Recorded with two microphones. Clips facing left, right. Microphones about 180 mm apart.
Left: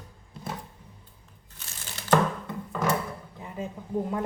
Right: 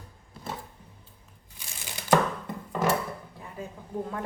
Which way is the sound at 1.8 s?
15° right (ahead or behind).